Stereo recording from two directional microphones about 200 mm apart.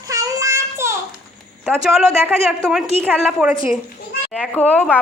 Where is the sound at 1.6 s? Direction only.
5° right (ahead or behind).